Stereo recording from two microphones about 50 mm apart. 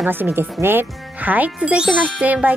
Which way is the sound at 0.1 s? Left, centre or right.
Right.